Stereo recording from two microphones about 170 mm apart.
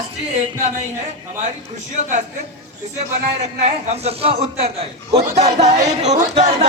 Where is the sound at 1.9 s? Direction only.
45° right (ahead or behind).